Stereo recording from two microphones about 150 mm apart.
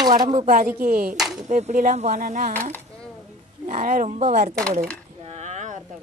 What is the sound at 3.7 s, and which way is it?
Speech, 60° right (ahead or behind).